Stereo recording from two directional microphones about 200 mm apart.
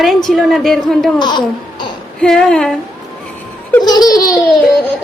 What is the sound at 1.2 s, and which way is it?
Speech, 20° left (ahead or behind).